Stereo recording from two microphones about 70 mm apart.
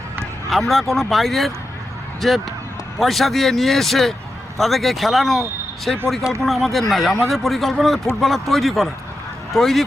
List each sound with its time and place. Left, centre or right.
0.5 s speech: centre